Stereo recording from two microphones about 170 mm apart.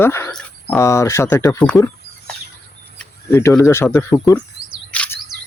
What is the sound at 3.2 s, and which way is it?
Speech, 15° left (ahead or behind).